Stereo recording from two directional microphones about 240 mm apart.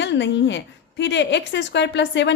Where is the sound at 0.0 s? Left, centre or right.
Left.